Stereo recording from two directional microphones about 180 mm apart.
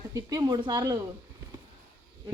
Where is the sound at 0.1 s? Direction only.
20° right (ahead or behind).